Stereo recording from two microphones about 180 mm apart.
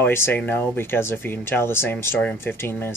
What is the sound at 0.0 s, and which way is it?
Speech, 10° left (ahead or behind).